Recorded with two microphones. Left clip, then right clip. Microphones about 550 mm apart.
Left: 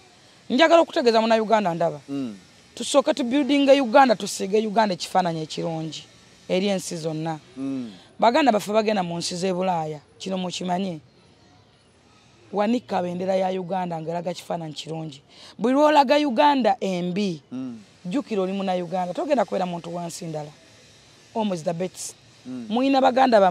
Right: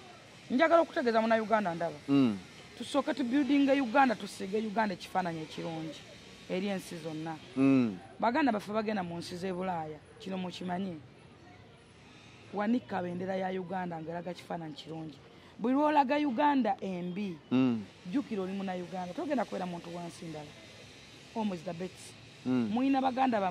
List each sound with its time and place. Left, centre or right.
0.5 s a man's voice: left
2.0 s speech: centre
2.8 s a man's voice: left
7.5 s speech: centre
8.2 s a man's voice: left
12.5 s a man's voice: left
17.5 s speech: centre
18.1 s a man's voice: left